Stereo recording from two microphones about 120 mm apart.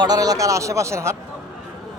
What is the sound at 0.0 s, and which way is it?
Speech, 30° right (ahead or behind).